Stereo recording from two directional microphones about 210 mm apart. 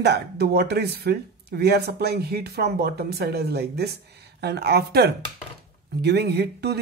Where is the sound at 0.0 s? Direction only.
50° right (ahead or behind).